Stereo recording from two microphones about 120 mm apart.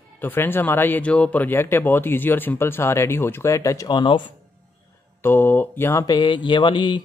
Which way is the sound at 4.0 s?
40° left (ahead or behind).